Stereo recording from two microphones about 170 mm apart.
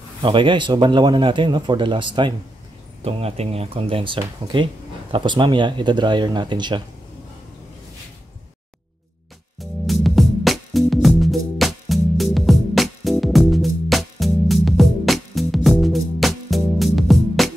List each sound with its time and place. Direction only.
0.2 s speech: 30° right (ahead or behind)
10.0 s music: centre (ahead or behind)